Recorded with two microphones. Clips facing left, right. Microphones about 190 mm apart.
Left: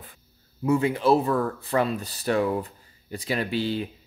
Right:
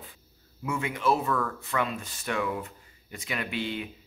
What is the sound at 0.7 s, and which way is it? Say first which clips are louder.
Speech: left 7 dB; 35° left (ahead or behind).